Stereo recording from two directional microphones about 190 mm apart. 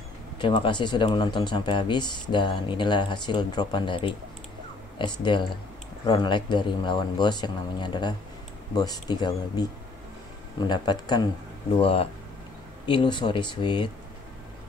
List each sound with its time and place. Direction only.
0.4 s speech: 25° left (ahead or behind)
10.7 s speech: 20° left (ahead or behind)